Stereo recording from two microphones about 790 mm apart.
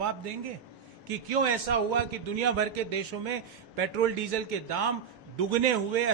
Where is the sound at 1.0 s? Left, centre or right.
Right.